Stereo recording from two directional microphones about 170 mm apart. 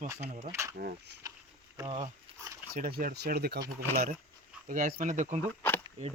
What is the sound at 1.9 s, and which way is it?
Speech, 40° right (ahead or behind).